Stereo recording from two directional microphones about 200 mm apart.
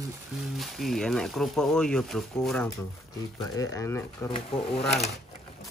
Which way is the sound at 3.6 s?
15° left (ahead or behind).